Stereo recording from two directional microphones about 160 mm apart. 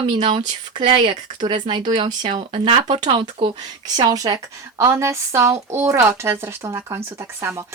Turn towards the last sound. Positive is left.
turn(degrees=-20)  # may be behind; listen again after turning